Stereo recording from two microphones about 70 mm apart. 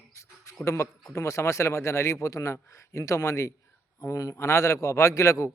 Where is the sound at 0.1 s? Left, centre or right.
Left.